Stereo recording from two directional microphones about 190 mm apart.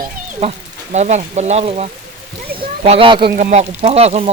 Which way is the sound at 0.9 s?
35° right (ahead or behind).